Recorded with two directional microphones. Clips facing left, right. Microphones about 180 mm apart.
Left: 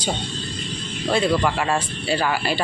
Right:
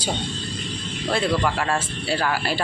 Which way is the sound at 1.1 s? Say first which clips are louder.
Left 2 dB; centre (ahead or behind).